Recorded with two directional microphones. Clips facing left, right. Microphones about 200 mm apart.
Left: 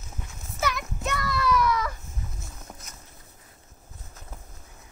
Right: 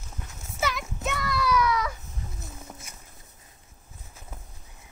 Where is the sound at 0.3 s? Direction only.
Centre (ahead or behind).